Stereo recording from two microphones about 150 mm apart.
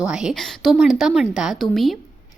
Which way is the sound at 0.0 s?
5° right (ahead or behind).